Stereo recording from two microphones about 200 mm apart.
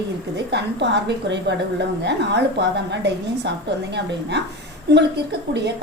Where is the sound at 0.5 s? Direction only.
60° right (ahead or behind).